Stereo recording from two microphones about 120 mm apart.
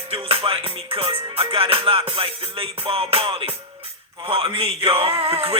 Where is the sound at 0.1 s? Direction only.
50° right (ahead or behind).